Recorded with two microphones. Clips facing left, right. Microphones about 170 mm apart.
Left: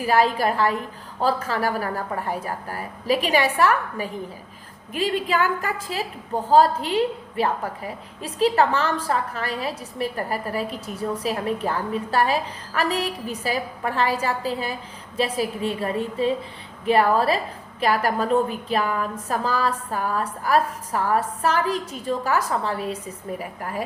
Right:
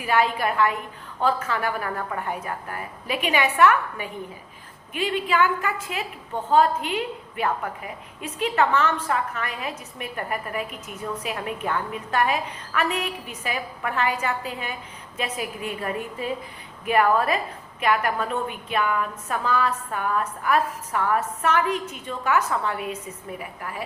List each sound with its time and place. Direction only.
0.0 s a woman's voice: 35° left (ahead or behind)